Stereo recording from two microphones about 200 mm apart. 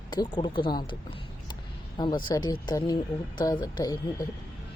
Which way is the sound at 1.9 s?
20° left (ahead or behind).